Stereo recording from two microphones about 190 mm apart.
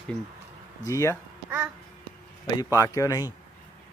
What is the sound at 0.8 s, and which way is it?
Speech, 15° left (ahead or behind).